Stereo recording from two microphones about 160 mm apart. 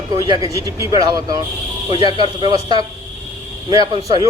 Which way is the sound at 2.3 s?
30° right (ahead or behind).